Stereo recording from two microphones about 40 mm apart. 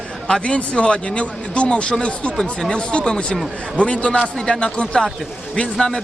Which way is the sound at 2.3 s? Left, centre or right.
Centre.